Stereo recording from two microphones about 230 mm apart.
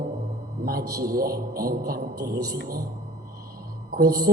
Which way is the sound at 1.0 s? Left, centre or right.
Right.